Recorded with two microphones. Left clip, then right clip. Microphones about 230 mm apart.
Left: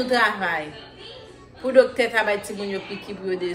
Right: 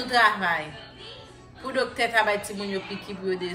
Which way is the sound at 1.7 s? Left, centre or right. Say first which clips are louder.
Left 8 dB; centre.